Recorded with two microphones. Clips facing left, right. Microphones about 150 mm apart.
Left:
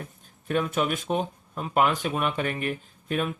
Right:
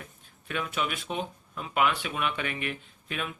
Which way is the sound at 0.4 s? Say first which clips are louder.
Left 6 dB; 40° left (ahead or behind).